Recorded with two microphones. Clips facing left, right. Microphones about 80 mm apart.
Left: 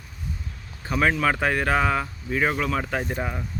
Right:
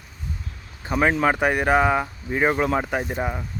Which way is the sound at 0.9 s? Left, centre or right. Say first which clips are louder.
Right 2 dB; right.